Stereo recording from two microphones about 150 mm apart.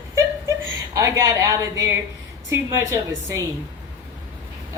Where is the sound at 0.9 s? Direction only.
20° right (ahead or behind).